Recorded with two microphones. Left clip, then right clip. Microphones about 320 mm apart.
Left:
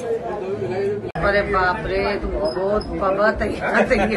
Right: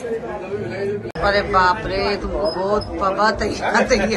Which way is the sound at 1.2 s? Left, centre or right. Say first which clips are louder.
Right 3 dB; centre.